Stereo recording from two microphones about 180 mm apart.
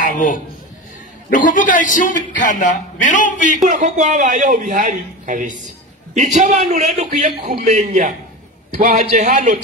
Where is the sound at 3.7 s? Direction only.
45° right (ahead or behind).